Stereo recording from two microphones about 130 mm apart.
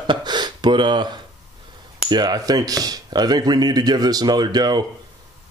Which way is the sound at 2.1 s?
35° right (ahead or behind).